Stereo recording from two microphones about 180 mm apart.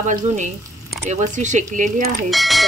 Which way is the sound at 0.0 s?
45° right (ahead or behind).